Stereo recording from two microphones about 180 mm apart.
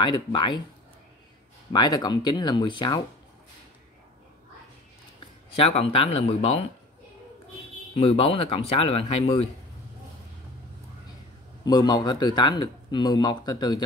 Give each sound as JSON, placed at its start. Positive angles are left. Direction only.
{"t": 0.0, "sound": "speech", "side_deg": 25}
{"t": 1.7, "sound": "speech", "side_deg": 25}
{"t": 5.6, "sound": "speech", "side_deg": 35}
{"t": 8.0, "sound": "speech", "side_deg": 30}
{"t": 11.6, "sound": "speech", "side_deg": 20}